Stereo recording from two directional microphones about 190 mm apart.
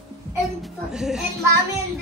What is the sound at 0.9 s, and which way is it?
Speech, 5° right (ahead or behind).